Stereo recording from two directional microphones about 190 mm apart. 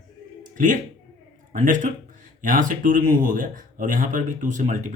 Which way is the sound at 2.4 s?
45° right (ahead or behind).